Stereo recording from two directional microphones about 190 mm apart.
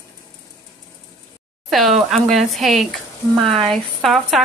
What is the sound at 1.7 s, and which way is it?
Speech, centre (ahead or behind).